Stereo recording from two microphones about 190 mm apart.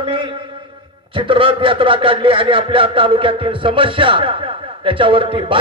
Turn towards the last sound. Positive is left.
turn(degrees=-25)  # may be behind; listen again after turning